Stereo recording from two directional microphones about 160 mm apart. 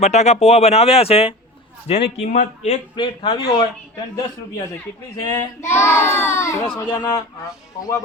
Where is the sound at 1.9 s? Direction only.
45° left (ahead or behind); by 3.4 s 30° left (ahead or behind).